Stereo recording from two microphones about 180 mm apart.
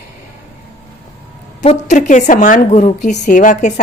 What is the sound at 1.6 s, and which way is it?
A woman's voice, 40° left (ahead or behind).